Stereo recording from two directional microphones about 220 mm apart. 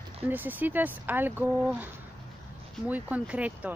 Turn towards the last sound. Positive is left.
turn(degrees=-5)  # may be behind; listen again after turning